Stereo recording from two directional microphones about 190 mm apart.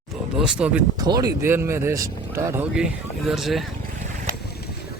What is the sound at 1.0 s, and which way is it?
Speech, 20° right (ahead or behind).